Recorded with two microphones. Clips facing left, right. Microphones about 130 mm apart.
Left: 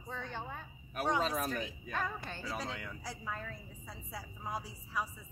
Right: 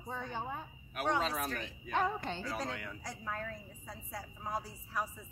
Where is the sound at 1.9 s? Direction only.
20° right (ahead or behind).